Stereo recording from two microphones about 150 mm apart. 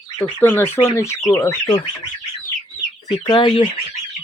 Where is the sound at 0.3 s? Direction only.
15° left (ahead or behind).